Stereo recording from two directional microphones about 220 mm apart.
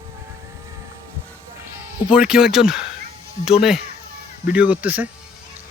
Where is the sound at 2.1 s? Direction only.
5° right (ahead or behind).